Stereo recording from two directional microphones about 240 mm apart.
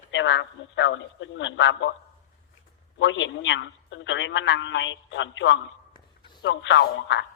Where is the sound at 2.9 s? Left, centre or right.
Left.